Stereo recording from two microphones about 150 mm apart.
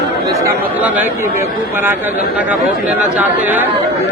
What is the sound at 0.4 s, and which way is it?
Speech, 10° right (ahead or behind).